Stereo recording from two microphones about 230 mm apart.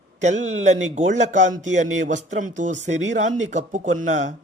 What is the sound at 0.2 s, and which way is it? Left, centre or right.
Speech, right.